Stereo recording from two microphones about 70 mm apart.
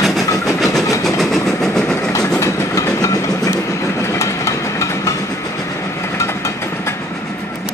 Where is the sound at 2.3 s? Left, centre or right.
Left.